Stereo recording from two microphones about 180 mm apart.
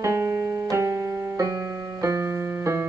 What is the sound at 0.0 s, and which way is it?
Music, 15° right (ahead or behind).